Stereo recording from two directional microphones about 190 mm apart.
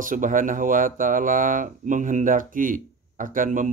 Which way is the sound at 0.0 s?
45° right (ahead or behind).